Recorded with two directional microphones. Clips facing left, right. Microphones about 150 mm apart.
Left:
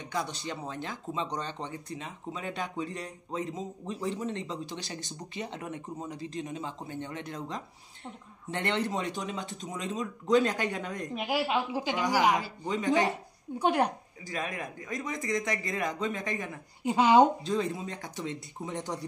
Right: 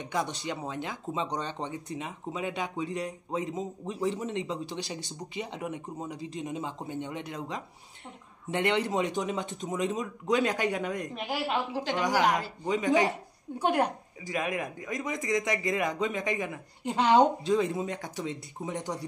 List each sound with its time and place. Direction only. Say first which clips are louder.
0.1 s a man's voice: right 2 dB; 15° right (ahead or behind)
8.5 s a man's voice: right 3 dB; 15° right (ahead or behind)
11.1 s a woman's voice: left 4 dB; 5° left (ahead or behind)
12.7 s a man's voice: right 2 dB; 10° right (ahead or behind)
13.6 s a woman's voice: even; centre (ahead or behind)
14.2 s a man's voice: right 4 dB; 15° right (ahead or behind)
16.8 s a woman's voice: left 1 dB; 5° left (ahead or behind)
17.6 s a man's voice: right 3 dB; 15° right (ahead or behind)